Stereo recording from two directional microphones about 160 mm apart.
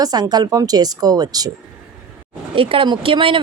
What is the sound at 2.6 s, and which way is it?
Speech, 35° right (ahead or behind).